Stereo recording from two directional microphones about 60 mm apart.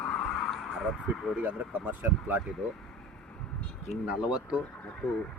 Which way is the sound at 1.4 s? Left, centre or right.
Right.